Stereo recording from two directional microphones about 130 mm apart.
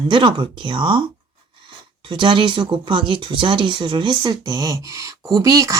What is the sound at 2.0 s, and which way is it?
A woman's voice, 40° right (ahead or behind).